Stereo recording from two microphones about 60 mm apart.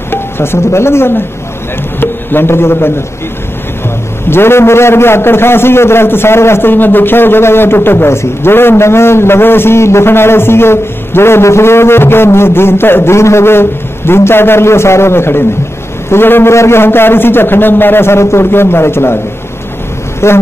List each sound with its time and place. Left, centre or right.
0.1 s a sound: left
2.0 s music: left
4.3 s a man's voice: left
20.2 s a man's voice: left